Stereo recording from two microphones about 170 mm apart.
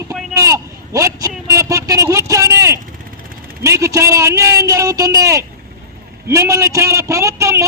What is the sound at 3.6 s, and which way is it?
A man's voice, 20° right (ahead or behind).